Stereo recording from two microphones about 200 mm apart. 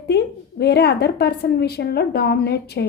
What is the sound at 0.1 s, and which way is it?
A woman's voice, 55° left (ahead or behind).